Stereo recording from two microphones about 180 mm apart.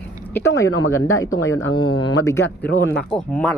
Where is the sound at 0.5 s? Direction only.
15° left (ahead or behind).